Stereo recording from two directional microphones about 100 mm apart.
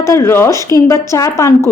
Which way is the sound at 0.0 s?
25° left (ahead or behind).